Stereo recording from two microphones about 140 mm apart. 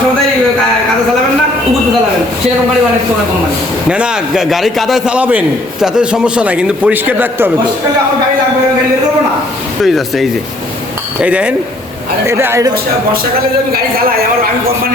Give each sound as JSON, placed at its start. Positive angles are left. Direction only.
{"t": 3.8, "sound": "a man's voice", "side_deg": -5}
{"t": 9.8, "sound": "a man's voice", "side_deg": 0}